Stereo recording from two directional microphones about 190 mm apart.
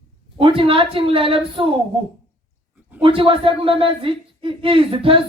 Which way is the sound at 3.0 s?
30° right (ahead or behind).